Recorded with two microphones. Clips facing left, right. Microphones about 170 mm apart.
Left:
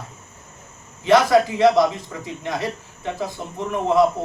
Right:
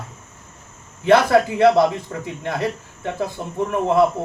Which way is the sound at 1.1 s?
60° right (ahead or behind).